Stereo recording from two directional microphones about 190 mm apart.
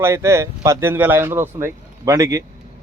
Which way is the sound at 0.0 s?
15° right (ahead or behind).